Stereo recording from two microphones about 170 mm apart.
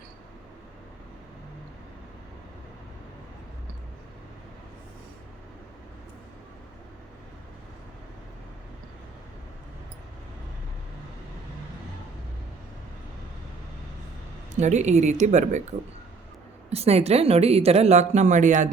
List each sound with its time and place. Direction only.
14.5 s speech: 45° right (ahead or behind)
16.6 s speech: 35° right (ahead or behind)